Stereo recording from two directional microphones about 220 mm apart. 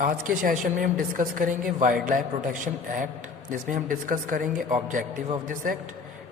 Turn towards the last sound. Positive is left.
turn(degrees=-35)  # may be behind; listen again after turning